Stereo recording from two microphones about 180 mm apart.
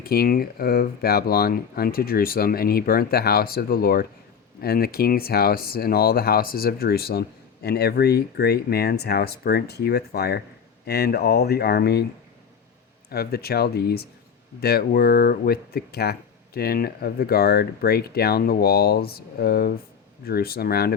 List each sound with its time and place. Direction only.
0.0 s speech: 55° left (ahead or behind)
13.1 s speech: 60° left (ahead or behind)